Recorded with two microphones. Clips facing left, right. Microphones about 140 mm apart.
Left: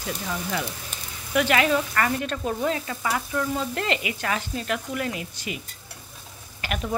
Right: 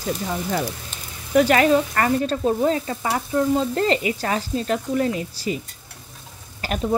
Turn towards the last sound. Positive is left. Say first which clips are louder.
# right 4 dB
turn(degrees=-35)  # may be behind; listen again after turning